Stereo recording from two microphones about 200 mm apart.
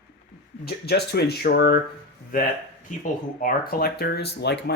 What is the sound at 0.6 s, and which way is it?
Speech, 50° left (ahead or behind).